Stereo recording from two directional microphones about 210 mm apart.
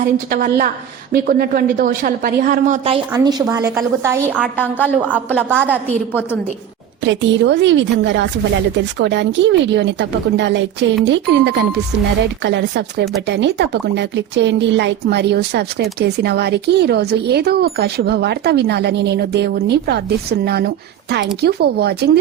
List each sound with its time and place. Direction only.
0.0 s a woman's voice: 45° right (ahead or behind)
3.1 s a woman's voice: 15° right (ahead or behind)
4.4 s a woman's voice: 5° left (ahead or behind)
5.5 s a woman's voice: 10° right (ahead or behind)
7.0 s a woman's voice: 60° right (ahead or behind)